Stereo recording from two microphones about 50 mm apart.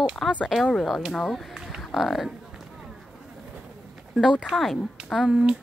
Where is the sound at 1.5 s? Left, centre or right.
Centre.